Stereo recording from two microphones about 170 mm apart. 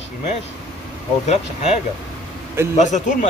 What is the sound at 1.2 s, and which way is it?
A man's voice, 40° left (ahead or behind).